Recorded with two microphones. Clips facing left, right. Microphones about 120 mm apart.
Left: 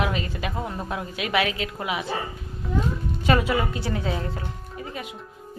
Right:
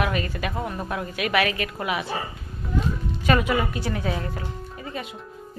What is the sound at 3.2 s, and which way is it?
A woman's voice, 25° left (ahead or behind).